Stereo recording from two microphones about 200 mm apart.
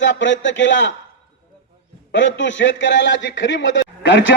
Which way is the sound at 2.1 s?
65° left (ahead or behind).